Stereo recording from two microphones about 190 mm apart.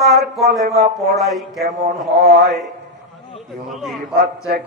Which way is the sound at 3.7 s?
Centre (ahead or behind).